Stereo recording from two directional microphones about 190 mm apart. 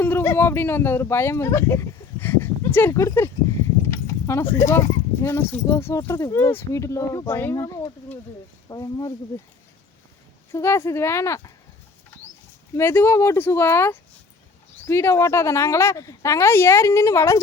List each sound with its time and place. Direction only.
0.0 s speech: 10° left (ahead or behind)
10.5 s speech: 15° left (ahead or behind)
12.7 s speech: 15° left (ahead or behind)